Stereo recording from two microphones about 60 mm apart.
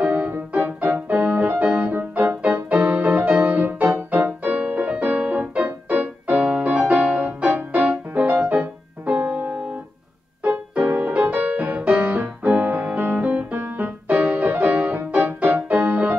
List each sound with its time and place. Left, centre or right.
0.0 s music: right